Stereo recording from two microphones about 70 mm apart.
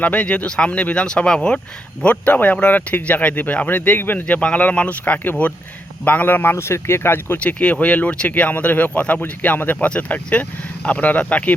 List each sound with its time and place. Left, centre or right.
0.0 s speech: centre; by 7.3 s left
7.3 s speech: centre